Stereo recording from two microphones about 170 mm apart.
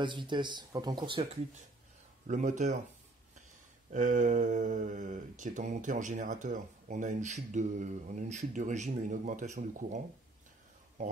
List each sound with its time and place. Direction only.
0.0 s speech: 25° right (ahead or behind)
2.2 s speech: 45° right (ahead or behind)
3.9 s speech: 50° right (ahead or behind)